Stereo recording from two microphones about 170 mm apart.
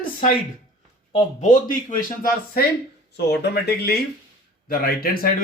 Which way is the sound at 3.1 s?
75° left (ahead or behind).